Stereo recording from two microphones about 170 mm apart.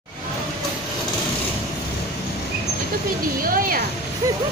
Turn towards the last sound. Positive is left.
turn(degrees=-55)  # may be behind; listen again after turning